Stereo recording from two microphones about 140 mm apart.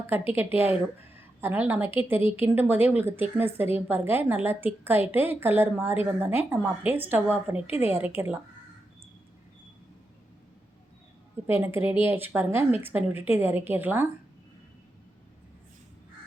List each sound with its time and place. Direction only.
0.1 s a woman's voice: 15° right (ahead or behind)
11.4 s a woman's voice: 15° right (ahead or behind)